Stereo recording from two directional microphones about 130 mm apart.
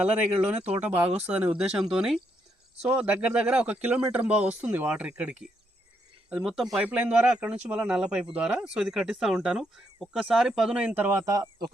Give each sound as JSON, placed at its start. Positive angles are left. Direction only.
{"t": 0.0, "sound": "speech", "side_deg": -10}
{"t": 11.3, "sound": "speech", "side_deg": -25}